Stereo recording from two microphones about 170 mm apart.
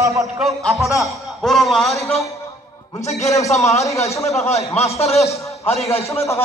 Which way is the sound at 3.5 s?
40° left (ahead or behind).